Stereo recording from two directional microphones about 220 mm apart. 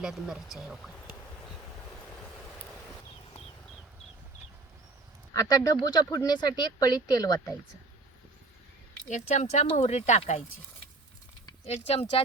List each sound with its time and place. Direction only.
0.0 s speech: centre (ahead or behind)
5.3 s speech: 15° left (ahead or behind)
9.0 s speech: 35° left (ahead or behind)
11.4 s a sound: 25° left (ahead or behind)